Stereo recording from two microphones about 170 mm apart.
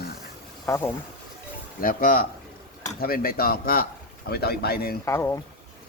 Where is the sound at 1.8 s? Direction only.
55° left (ahead or behind).